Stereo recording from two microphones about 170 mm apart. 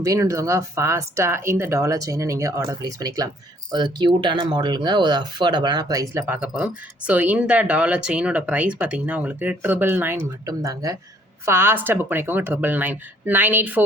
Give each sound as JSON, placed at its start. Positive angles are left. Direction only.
{"t": 0.0, "sound": "speech", "side_deg": -20}